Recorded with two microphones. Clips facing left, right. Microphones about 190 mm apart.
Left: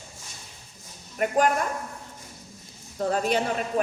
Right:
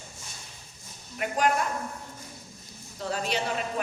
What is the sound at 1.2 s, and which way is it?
Speech, 45° left (ahead or behind).